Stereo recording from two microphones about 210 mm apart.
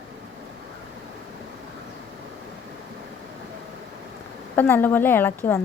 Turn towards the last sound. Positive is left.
turn(degrees=10)  # may be behind; listen again after turning